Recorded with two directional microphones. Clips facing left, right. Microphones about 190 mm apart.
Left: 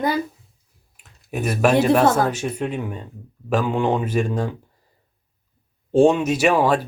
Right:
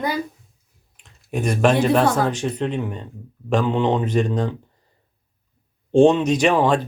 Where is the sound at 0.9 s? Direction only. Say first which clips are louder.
Right 2 dB; 5° left (ahead or behind).